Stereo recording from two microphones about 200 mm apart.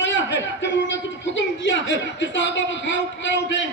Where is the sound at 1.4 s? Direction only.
65° left (ahead or behind).